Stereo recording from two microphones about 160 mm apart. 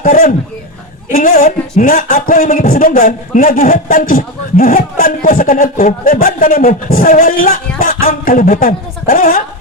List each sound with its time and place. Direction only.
0.0 s speech: 60° left (ahead or behind)